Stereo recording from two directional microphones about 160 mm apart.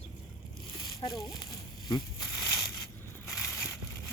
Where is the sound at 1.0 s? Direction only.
20° left (ahead or behind).